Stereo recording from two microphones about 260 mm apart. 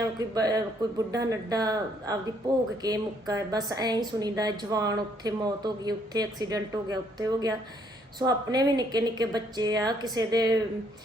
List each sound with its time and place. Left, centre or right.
0.2 s a woman's voice: centre